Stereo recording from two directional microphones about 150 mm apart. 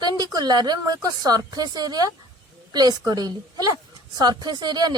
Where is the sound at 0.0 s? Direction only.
25° right (ahead or behind).